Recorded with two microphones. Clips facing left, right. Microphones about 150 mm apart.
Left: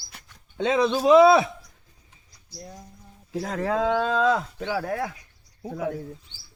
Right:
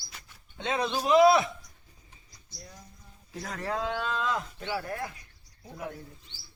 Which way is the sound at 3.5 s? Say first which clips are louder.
Left 8 dB; 90° left.